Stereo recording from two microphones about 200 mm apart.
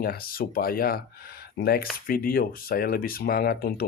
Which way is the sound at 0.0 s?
50° left (ahead or behind).